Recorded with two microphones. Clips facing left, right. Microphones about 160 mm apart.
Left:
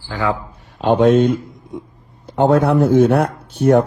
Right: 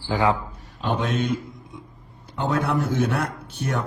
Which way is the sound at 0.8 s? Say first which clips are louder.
Left 12 dB; 55° left (ahead or behind).